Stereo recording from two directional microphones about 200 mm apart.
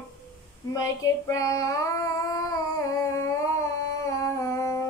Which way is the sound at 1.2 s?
15° left (ahead or behind).